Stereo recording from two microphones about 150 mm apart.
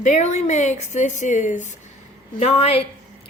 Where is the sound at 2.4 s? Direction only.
40° left (ahead or behind).